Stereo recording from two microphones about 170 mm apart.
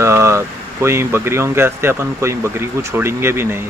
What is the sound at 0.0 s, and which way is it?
Speech, 15° right (ahead or behind).